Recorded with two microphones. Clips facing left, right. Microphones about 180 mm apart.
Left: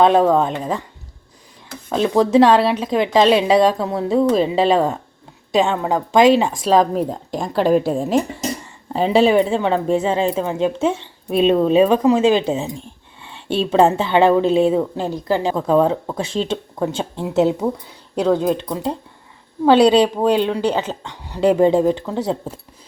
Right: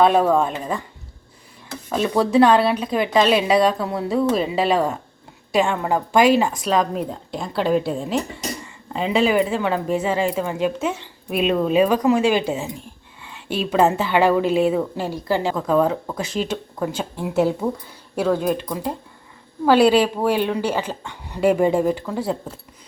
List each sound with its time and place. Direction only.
0.3 s a woman's voice: 20° left (ahead or behind)
1.9 s a woman's voice: 20° left (ahead or behind)
6.6 s a woman's voice: 30° left (ahead or behind)
8.9 s a woman's voice: 35° left (ahead or behind)